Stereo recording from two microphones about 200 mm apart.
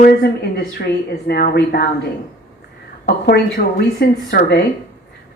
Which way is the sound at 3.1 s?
50° left (ahead or behind).